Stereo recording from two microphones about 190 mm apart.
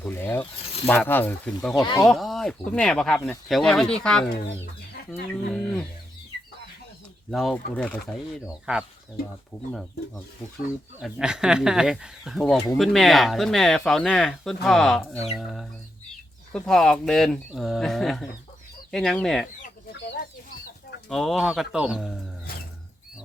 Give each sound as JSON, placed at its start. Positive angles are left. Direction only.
{"t": 0.0, "sound": "speech", "side_deg": 10}
{"t": 1.7, "sound": "speech", "side_deg": 20}
{"t": 2.0, "sound": "speech", "side_deg": 0}
{"t": 5.5, "sound": "speech", "side_deg": 0}
{"t": 7.3, "sound": "speech", "side_deg": 0}
{"t": 11.0, "sound": "speech", "side_deg": -5}
{"t": 16.5, "sound": "speech", "side_deg": 5}
{"t": 21.1, "sound": "speech", "side_deg": 0}